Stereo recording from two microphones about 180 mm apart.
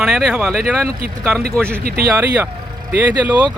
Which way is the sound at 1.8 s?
60° right (ahead or behind).